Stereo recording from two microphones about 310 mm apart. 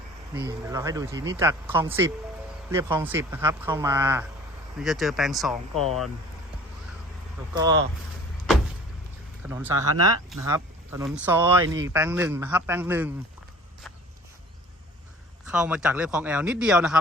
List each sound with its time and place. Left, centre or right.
0.3 s speech: centre
9.4 s speech: centre
9.7 s speech: right
10.2 s speech: centre
15.4 s speech: centre